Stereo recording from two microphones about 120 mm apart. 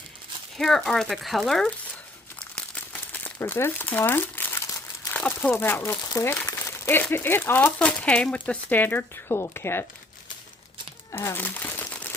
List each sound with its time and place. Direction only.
0.5 s speech: 5° left (ahead or behind)
3.1 s crumpling: 15° left (ahead or behind)
3.4 s speech: 20° left (ahead or behind)
11.1 s crumpling: 20° left (ahead or behind)